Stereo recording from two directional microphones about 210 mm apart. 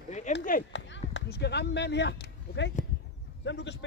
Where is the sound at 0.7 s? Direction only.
55° left (ahead or behind).